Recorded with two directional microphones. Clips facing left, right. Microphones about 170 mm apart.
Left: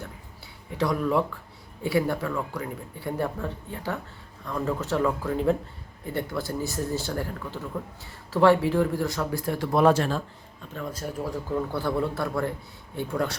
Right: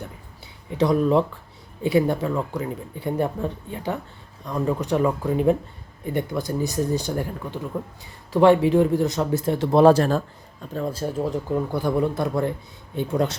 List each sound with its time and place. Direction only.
0.7 s speech: 20° right (ahead or behind)